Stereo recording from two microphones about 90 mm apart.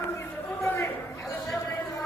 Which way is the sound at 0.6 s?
30° left (ahead or behind).